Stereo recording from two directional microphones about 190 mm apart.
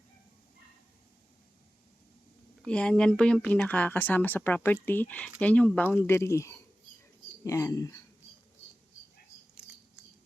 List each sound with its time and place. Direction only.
2.6 s speech: 5° left (ahead or behind)